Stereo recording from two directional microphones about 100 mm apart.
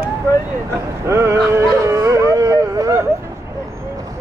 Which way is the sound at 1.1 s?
25° right (ahead or behind).